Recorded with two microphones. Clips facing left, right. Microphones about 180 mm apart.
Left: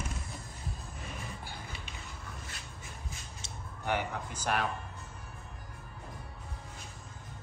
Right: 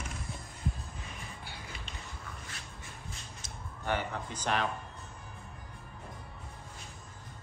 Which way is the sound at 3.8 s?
10° left (ahead or behind).